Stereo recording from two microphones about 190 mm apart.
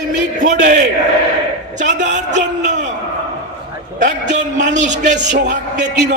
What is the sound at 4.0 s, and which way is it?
A man's voice, 40° right (ahead or behind).